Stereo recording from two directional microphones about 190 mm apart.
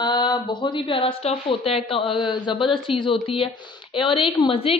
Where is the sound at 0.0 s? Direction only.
20° left (ahead or behind).